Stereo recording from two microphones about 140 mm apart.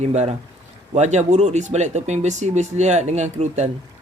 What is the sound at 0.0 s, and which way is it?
Speech, 50° right (ahead or behind).